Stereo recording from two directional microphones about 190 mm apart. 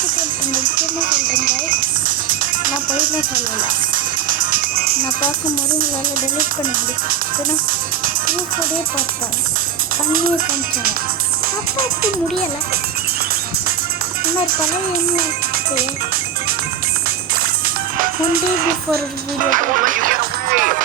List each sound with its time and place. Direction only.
0.2 s music: 50° right (ahead or behind)
19.5 s music: 45° right (ahead or behind)